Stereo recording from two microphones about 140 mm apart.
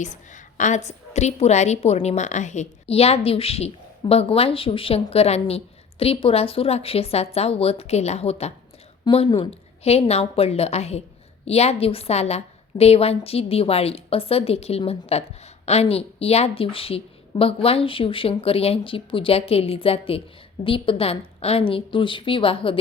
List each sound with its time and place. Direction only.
0.0 s a woman's voice: 60° left (ahead or behind); by 22.8 s 40° left (ahead or behind)